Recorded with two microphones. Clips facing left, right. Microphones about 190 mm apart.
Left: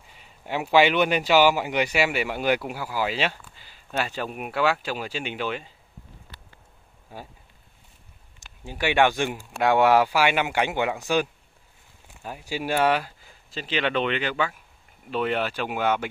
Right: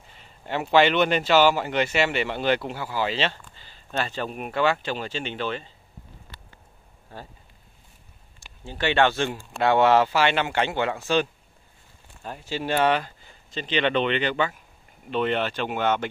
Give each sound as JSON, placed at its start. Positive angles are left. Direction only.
{"t": 0.1, "sound": "a man's voice", "side_deg": 10}
{"t": 7.1, "sound": "speech", "side_deg": 10}
{"t": 8.4, "sound": "a man's voice", "side_deg": 10}